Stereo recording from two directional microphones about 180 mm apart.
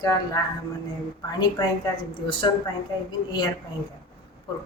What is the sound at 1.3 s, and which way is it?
Speech, 25° left (ahead or behind).